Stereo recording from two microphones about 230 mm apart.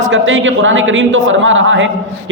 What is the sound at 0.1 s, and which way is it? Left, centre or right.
A man's voice, right.